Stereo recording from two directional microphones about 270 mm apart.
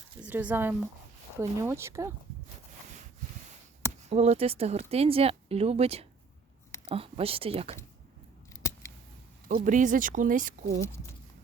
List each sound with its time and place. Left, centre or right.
0.2 s speech: centre
4.1 s speech: right
8.5 s scissors: centre
9.6 s speech: right